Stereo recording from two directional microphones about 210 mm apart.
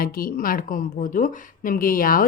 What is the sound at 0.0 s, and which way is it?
A woman's voice, 45° left (ahead or behind).